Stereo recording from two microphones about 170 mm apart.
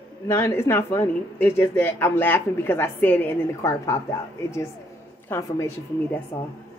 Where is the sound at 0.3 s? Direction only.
15° left (ahead or behind).